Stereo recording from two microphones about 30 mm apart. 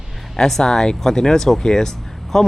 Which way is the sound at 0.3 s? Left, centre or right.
Centre.